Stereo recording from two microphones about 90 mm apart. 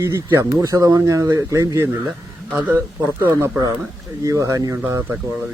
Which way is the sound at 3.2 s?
25° right (ahead or behind).